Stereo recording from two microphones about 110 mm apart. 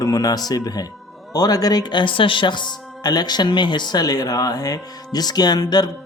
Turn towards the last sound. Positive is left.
turn(degrees=40)  # may be behind; listen again after turning